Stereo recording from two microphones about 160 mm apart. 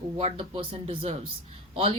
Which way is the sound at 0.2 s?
40° right (ahead or behind).